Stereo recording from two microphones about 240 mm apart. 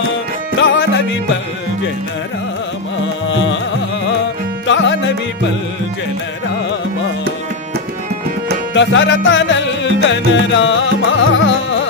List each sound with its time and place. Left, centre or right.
0.6 s music: left
4.6 s music: left
8.7 s music: left